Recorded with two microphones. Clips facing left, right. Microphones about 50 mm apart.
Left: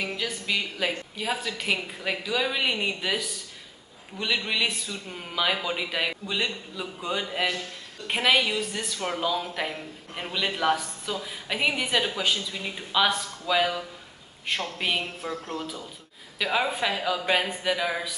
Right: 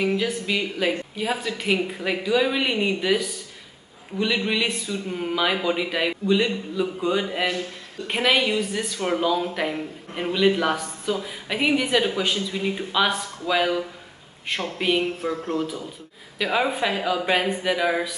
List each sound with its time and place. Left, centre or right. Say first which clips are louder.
0.0 s a man's voice: right 7 dB; centre
1.8 s a man's voice: right 5 dB; centre
4.2 s a man's voice: right 4 dB; centre
12.4 s a man's voice: right 7 dB; centre
15.0 s speech: right 7 dB; right
16.3 s a man's voice: right 3 dB; centre